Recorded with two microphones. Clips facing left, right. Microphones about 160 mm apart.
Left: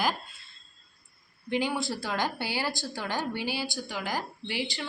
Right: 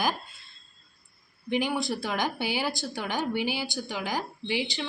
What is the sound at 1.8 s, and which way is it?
A woman's voice, 20° right (ahead or behind).